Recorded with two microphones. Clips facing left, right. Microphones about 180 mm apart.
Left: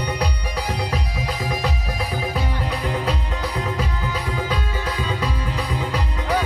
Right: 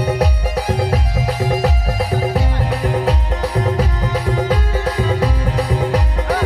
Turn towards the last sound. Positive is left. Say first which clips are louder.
# right 7 dB
turn(degrees=-50)  # may be behind; listen again after turning